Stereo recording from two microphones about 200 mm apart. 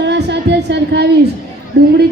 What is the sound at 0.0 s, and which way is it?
Music, 60° right (ahead or behind).